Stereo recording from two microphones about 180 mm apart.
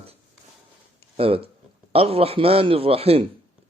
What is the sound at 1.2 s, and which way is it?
A man's voice, 30° right (ahead or behind).